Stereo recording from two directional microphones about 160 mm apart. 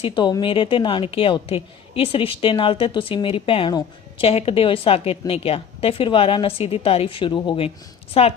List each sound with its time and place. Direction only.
0.0 s a woman's voice: 30° left (ahead or behind)